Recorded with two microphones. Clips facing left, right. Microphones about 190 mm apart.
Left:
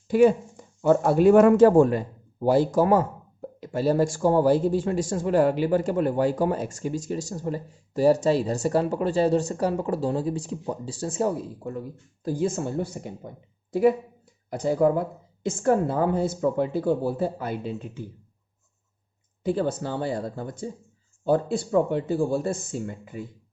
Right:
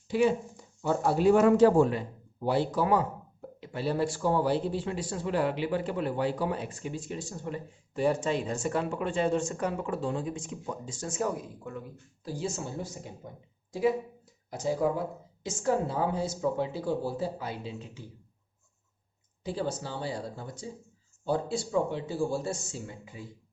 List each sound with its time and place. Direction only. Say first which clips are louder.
0.1 s speech: left 7 dB; 50° left (ahead or behind)
19.4 s speech: left 7 dB; 55° left (ahead or behind)